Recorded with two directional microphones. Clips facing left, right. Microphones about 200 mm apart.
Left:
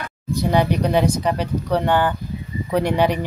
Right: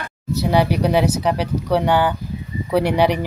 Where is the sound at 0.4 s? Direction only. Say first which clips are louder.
Right 1 dB; 10° right (ahead or behind).